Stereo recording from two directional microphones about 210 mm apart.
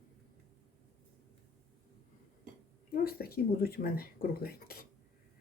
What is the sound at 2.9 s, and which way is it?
Speech, 45° left (ahead or behind).